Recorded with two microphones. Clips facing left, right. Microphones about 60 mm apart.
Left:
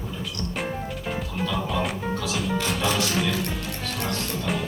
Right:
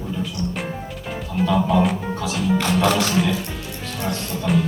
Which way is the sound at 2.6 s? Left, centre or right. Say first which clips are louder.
Right 8 dB; right.